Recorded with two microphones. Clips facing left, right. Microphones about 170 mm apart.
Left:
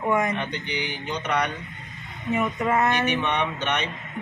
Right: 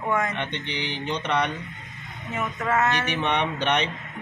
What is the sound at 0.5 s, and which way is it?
Mantra, 25° right (ahead or behind).